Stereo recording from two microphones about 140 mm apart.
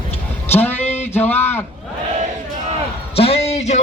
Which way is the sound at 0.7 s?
50° left (ahead or behind).